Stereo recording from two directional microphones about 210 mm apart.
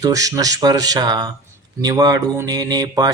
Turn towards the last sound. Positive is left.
turn(degrees=-20)  # may be behind; listen again after turning